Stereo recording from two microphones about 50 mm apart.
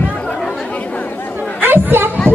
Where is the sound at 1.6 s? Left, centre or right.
Right.